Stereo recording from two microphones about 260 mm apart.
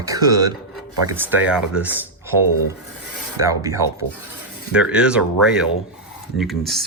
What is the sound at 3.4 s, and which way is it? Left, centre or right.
Speech, centre.